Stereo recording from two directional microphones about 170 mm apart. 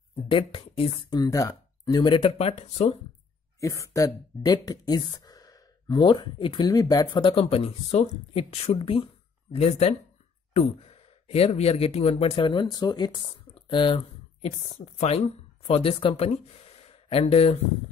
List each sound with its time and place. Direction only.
0.1 s speech: 35° left (ahead or behind)
3.6 s speech: 20° left (ahead or behind); by 17.6 s 35° left (ahead or behind)